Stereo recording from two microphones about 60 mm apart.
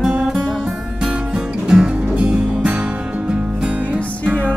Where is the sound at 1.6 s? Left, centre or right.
Centre.